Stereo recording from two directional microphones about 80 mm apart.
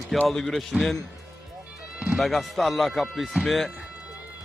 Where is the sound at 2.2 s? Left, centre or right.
Centre.